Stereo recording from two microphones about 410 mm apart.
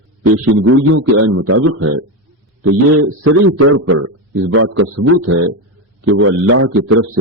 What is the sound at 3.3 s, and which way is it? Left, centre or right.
A man's voice, right.